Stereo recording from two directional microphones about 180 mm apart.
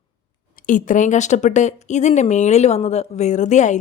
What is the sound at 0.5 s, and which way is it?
Speech, 50° left (ahead or behind).